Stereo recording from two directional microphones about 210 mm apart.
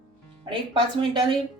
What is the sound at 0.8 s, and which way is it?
Speech, 20° right (ahead or behind).